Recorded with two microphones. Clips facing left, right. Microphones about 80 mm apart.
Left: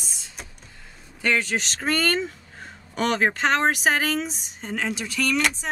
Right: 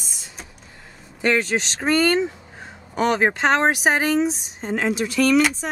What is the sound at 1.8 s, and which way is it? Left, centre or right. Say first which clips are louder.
Speech: right 6 dB; centre.